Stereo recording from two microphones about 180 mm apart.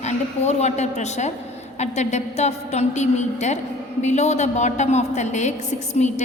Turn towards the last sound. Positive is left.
turn(degrees=40)  # may be behind; listen again after turning